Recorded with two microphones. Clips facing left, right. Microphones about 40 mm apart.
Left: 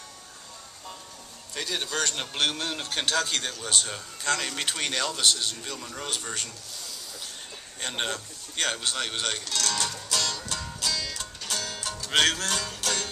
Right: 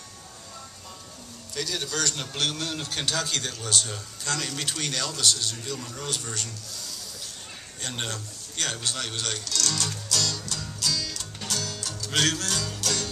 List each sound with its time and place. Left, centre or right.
1.5 s a man's voice: left
7.8 s music: centre